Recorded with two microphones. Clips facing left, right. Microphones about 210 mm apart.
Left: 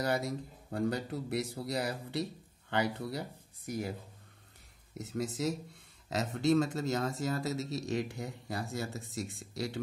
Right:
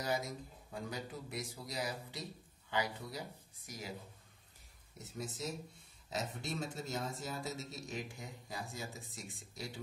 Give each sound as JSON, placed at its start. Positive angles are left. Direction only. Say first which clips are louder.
{"t": 0.0, "sound": "speech", "louder": "left 6 dB", "side_deg": 65}
{"t": 4.9, "sound": "speech", "louder": "left 9 dB", "side_deg": 75}